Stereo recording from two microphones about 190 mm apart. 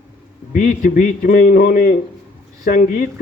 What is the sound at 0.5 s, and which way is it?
A man's voice, 45° left (ahead or behind).